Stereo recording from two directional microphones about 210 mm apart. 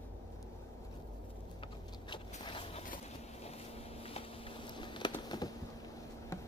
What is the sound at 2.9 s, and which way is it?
Boat, 30° left (ahead or behind).